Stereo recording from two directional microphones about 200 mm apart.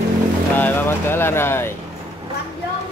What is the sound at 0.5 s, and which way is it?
Speech, 10° left (ahead or behind).